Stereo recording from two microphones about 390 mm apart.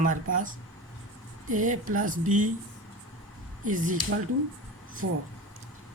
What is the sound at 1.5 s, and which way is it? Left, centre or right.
A man's voice, centre.